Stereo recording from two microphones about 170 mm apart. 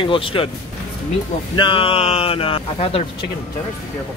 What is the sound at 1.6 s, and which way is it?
Speech, 30° left (ahead or behind).